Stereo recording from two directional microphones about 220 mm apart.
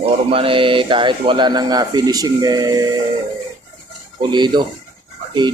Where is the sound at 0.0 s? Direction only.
25° right (ahead or behind).